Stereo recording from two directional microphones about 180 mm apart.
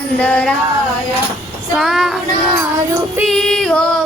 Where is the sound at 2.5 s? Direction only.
15° right (ahead or behind).